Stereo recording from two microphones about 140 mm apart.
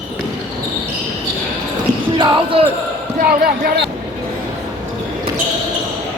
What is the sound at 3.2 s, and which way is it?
Speech, 90° right.